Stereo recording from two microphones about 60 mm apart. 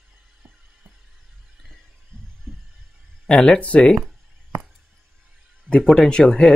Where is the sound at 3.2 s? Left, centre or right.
Centre.